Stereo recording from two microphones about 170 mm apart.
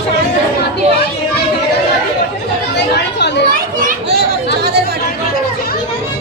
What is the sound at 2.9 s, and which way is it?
Children playing, 80° left.